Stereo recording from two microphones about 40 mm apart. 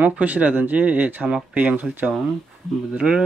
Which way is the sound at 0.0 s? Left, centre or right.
Right.